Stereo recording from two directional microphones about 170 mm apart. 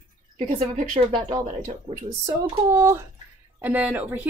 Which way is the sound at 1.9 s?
35° right (ahead or behind).